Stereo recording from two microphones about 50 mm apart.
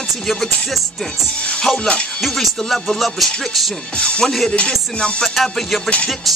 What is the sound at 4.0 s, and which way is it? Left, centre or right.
Music, centre.